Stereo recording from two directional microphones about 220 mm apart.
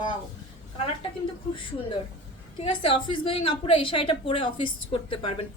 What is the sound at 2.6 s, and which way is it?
A woman's voice, 25° left (ahead or behind).